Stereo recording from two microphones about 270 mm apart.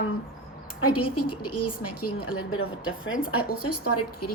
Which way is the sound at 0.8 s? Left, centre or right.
Left.